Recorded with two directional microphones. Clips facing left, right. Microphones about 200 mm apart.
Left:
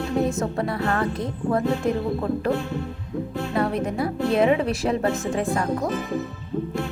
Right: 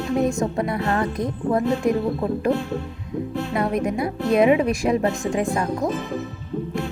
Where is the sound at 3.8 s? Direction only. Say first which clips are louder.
Right 1 dB; 15° right (ahead or behind).